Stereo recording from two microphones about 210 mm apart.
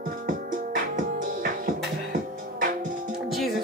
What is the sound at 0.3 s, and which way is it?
Music, 40° right (ahead or behind).